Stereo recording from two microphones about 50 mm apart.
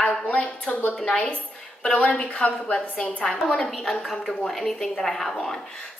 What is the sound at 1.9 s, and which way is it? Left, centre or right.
A woman's voice, left.